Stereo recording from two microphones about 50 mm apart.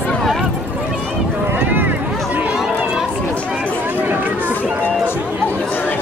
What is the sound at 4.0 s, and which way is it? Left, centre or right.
Chatter, right.